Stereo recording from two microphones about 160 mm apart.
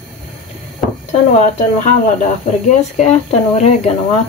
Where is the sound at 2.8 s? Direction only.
45° left (ahead or behind).